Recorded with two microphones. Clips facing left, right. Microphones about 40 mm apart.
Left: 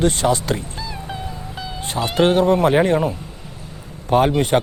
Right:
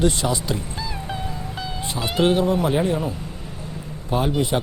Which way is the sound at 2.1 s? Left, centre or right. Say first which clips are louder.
Left 4 dB; left.